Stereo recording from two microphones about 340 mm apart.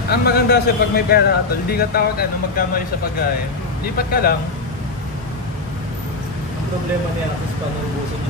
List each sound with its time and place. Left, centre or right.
0.1 s speech: left